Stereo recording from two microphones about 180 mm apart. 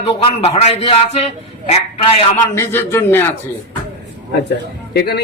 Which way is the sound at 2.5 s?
15° left (ahead or behind).